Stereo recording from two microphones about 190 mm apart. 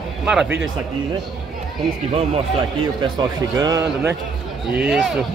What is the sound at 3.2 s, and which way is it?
A man's voice, 20° right (ahead or behind).